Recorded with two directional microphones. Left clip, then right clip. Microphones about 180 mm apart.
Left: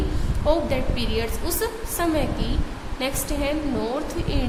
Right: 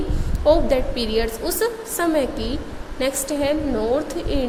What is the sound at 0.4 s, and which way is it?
A woman's voice, 25° right (ahead or behind).